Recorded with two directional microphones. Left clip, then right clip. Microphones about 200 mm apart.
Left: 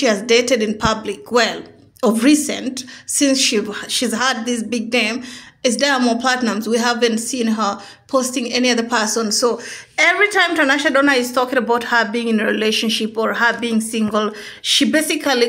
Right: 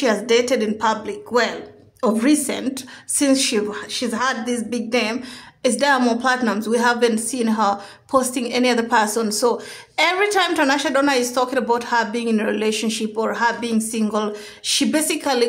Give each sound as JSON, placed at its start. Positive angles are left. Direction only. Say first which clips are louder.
{"t": 0.0, "sound": "a woman's voice", "louder": "left 3 dB", "side_deg": 10}
{"t": 2.4, "sound": "a woman's voice", "louder": "left 1 dB", "side_deg": 0}